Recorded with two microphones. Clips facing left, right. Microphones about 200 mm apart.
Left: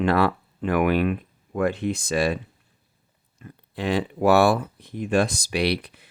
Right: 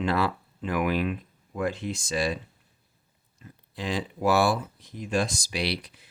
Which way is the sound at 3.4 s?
60° left (ahead or behind).